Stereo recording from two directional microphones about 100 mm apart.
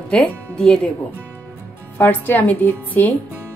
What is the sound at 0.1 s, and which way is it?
Speech, 5° left (ahead or behind).